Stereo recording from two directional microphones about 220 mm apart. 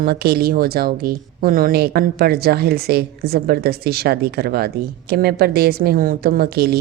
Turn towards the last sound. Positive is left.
turn(degrees=-45)  # may be behind; listen again after turning